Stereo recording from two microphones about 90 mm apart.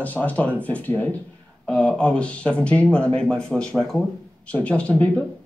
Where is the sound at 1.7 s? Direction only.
10° left (ahead or behind).